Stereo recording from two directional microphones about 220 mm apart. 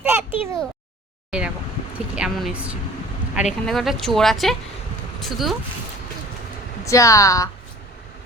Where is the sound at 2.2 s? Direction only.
Centre (ahead or behind).